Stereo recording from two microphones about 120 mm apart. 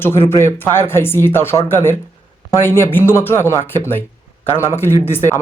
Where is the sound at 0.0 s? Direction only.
20° left (ahead or behind).